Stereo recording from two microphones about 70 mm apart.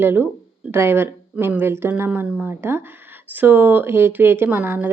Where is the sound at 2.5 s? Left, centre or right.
Right.